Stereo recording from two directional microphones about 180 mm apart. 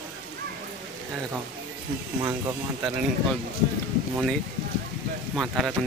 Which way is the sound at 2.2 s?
20° right (ahead or behind).